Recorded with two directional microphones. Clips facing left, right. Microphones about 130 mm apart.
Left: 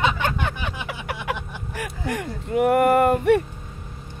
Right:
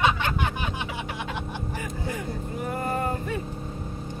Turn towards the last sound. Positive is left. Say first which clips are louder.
# left 11 dB
turn(degrees=80)